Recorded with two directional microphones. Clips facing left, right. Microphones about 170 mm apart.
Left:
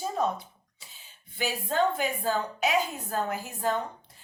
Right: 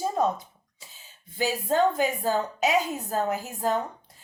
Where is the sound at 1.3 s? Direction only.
40° right (ahead or behind).